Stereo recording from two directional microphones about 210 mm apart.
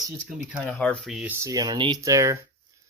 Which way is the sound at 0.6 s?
5° left (ahead or behind).